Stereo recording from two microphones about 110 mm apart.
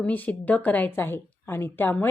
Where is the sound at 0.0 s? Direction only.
15° left (ahead or behind).